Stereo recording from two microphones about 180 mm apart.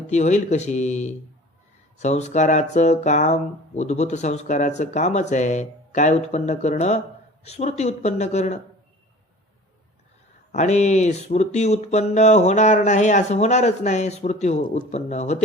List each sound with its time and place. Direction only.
0.1 s speech: 40° left (ahead or behind)
10.5 s speech: 40° left (ahead or behind)